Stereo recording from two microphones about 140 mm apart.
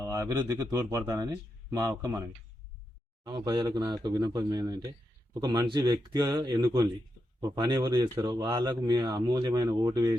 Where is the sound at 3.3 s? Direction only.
30° right (ahead or behind).